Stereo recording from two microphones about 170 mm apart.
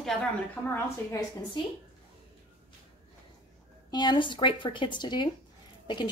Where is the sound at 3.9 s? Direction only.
25° left (ahead or behind).